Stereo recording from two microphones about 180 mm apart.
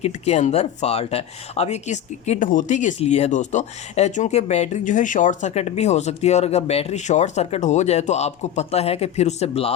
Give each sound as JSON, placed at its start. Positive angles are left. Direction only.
{"t": 0.0, "sound": "speech", "side_deg": 40}